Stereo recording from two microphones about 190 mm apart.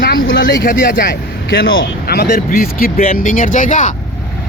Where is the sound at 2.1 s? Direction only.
55° left (ahead or behind).